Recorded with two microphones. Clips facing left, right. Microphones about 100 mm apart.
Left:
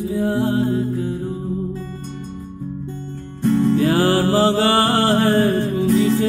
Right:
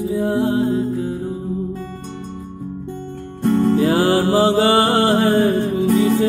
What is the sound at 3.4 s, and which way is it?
Music, 55° right (ahead or behind).